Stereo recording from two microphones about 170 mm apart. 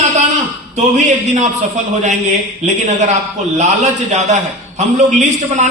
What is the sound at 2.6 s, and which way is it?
A man's voice, 45° right (ahead or behind).